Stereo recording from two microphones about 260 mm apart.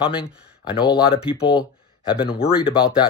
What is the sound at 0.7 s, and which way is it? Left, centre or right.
Speech, centre.